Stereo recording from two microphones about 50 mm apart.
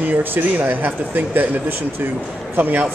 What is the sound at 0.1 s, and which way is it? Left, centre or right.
Speech, right.